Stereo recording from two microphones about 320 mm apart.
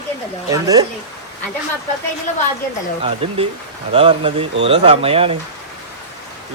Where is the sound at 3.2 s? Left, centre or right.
Centre.